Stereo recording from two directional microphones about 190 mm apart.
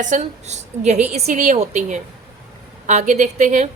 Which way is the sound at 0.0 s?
40° right (ahead or behind).